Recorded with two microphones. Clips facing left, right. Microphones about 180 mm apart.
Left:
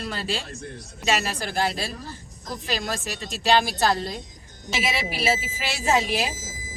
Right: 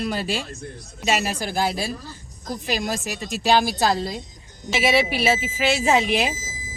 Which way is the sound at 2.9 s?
5° right (ahead or behind).